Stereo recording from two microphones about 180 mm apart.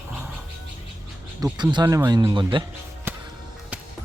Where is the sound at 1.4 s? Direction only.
25° right (ahead or behind).